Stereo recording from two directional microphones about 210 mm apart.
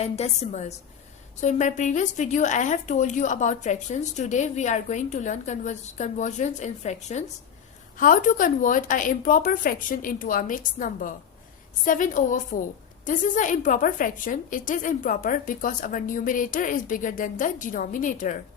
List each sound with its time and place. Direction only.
0.0 s a woman's voice: 30° left (ahead or behind)